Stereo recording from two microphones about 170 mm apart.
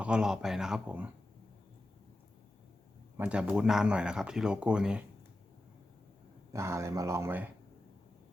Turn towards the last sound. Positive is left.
turn(degrees=-15)  # may be behind; listen again after turning